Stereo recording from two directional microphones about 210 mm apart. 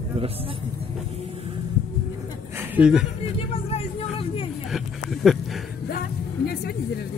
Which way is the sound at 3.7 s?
25° left (ahead or behind).